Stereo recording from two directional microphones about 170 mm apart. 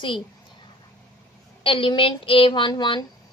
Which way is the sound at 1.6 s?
30° left (ahead or behind).